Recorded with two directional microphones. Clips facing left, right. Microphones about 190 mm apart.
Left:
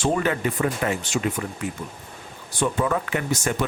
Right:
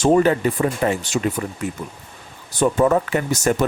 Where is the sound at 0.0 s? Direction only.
40° right (ahead or behind).